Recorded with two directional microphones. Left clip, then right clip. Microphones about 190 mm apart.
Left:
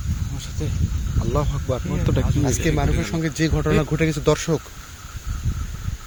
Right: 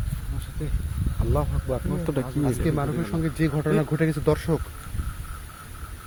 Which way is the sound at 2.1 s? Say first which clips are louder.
Left 2 dB; centre (ahead or behind).